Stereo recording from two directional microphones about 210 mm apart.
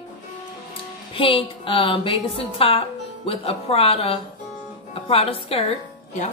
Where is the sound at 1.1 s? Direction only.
25° left (ahead or behind).